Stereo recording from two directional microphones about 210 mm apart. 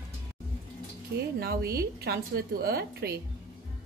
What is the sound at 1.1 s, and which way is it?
Speech, 45° right (ahead or behind).